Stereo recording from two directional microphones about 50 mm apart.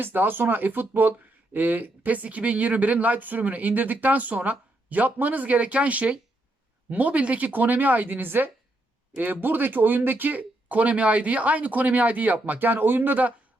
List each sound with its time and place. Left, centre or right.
0.0 s speech: right